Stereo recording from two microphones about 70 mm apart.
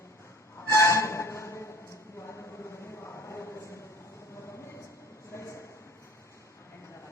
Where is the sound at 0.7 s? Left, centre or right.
Left.